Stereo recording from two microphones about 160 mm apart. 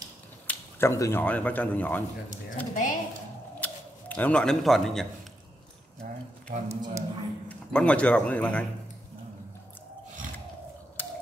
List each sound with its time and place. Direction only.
0.5 s a sound: 15° left (ahead or behind)
1.2 s speech: 10° left (ahead or behind)
2.2 s speech: 55° left (ahead or behind)
3.6 s speech: 10° left (ahead or behind)
6.7 s speech: 20° right (ahead or behind)
7.4 s a man's voice: 5° left (ahead or behind)